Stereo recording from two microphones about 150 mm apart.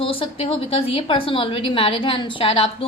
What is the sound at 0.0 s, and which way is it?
A woman's voice, 35° left (ahead or behind).